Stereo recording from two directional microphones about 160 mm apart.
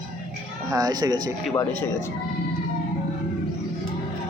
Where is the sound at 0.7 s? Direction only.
25° right (ahead or behind).